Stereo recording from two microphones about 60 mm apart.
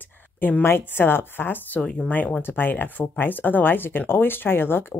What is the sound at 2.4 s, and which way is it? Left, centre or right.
Speech, left.